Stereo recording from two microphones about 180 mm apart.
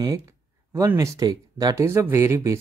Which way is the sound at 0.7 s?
15° right (ahead or behind).